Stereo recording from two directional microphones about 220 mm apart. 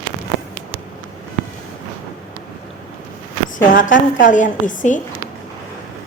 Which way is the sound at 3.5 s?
35° left (ahead or behind).